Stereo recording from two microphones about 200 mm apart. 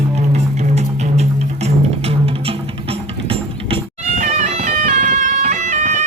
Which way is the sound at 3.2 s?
30° right (ahead or behind).